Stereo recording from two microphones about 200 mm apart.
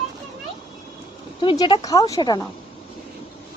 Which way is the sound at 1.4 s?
25° left (ahead or behind).